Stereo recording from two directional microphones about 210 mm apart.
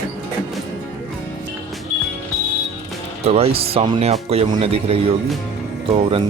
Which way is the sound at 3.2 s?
30° right (ahead or behind).